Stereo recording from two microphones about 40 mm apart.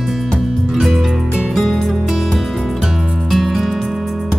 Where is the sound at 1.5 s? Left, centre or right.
Centre.